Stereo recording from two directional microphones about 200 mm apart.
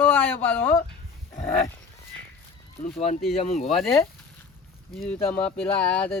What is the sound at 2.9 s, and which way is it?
Speech, 30° left (ahead or behind).